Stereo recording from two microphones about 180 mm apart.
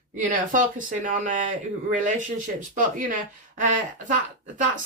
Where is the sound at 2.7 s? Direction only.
45° right (ahead or behind).